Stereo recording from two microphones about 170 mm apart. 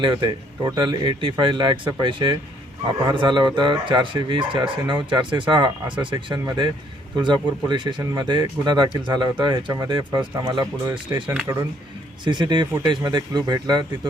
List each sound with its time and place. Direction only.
0.0 s speech: 30° right (ahead or behind)